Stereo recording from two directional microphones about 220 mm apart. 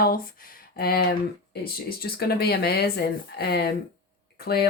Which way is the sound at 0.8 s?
45° left (ahead or behind).